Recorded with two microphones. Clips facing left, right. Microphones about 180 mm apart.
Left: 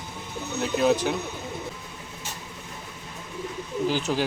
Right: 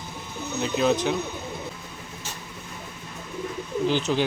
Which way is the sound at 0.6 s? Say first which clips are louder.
Even; 5° left (ahead or behind).